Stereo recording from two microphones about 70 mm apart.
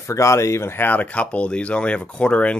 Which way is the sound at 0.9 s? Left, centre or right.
Left.